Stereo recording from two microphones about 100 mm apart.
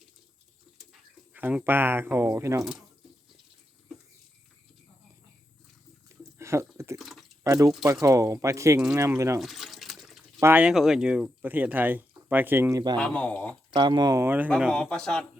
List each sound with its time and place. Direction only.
1.3 s speech: 15° right (ahead or behind)
6.1 s a sound: 30° right (ahead or behind)
7.0 s liquid: centre (ahead or behind)
7.4 s speech: 35° right (ahead or behind)
9.4 s water: centre (ahead or behind)
10.6 s speech: 5° right (ahead or behind); by 12.7 s 20° right (ahead or behind)
12.7 s speech: 45° right (ahead or behind)
13.0 s speech: 10° left (ahead or behind)
13.7 s speech: 50° right (ahead or behind)
14.3 s speech: 15° right (ahead or behind)
14.7 s speech: 10° left (ahead or behind)